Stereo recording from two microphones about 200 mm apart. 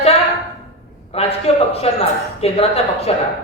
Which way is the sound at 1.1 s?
30° left (ahead or behind).